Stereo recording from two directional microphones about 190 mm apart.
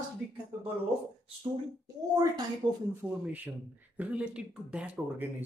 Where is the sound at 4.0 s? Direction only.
5° right (ahead or behind).